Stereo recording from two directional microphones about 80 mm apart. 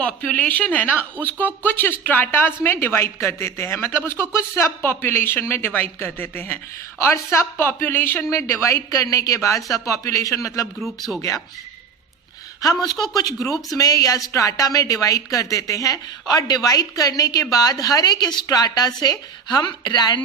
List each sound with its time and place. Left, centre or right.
0.0 s a woman's voice: centre; by 10.7 s left
10.8 s speech: centre
12.6 s a woman's voice: left
18.4 s a woman's voice: left